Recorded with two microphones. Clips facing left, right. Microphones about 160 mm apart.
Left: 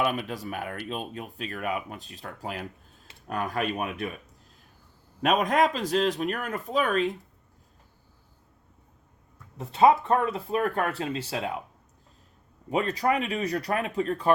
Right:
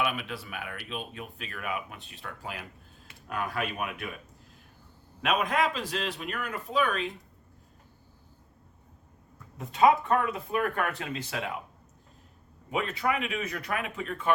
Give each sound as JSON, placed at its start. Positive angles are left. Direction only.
{"t": 0.0, "sound": "speech", "side_deg": 40}
{"t": 5.2, "sound": "speech", "side_deg": 40}
{"t": 9.6, "sound": "speech", "side_deg": 30}
{"t": 12.7, "sound": "speech", "side_deg": 40}